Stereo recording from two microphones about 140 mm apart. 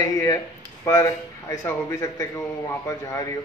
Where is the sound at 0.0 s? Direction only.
25° left (ahead or behind).